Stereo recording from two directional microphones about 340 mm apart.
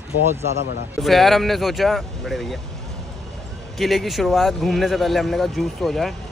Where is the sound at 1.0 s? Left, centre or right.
Centre.